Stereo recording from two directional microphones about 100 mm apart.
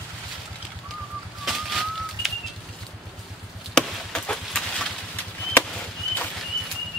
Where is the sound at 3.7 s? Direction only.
5° left (ahead or behind).